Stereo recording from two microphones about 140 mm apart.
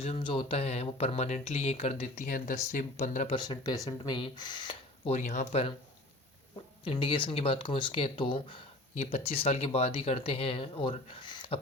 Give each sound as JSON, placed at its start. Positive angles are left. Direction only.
{"t": 0.0, "sound": "speech", "side_deg": 40}
{"t": 2.2, "sound": "speech", "side_deg": 70}
{"t": 2.7, "sound": "speech", "side_deg": 55}
{"t": 3.3, "sound": "speech", "side_deg": 30}
{"t": 5.1, "sound": "speech", "side_deg": 55}
{"t": 6.8, "sound": "speech", "side_deg": 40}
{"t": 9.0, "sound": "speech", "side_deg": 50}